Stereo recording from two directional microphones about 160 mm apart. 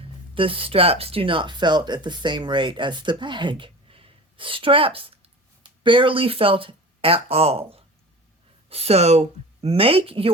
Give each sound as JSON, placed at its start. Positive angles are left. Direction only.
{"t": 0.0, "sound": "speech", "side_deg": -35}